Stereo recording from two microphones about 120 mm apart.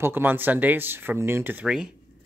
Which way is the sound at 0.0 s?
15° right (ahead or behind).